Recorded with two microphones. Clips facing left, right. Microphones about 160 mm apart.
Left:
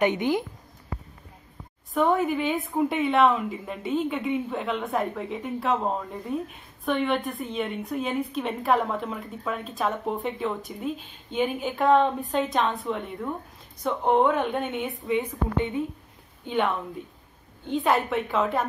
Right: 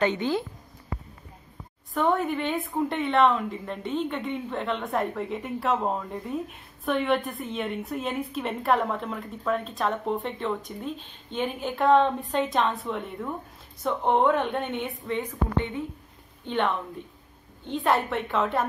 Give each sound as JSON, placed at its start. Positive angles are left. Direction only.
{"t": 0.0, "sound": "a woman's voice", "side_deg": 15}
{"t": 2.0, "sound": "a woman's voice", "side_deg": 0}
{"t": 16.4, "sound": "a woman's voice", "side_deg": 5}